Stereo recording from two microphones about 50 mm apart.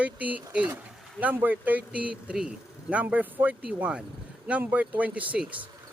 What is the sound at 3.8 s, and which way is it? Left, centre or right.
Speech, right.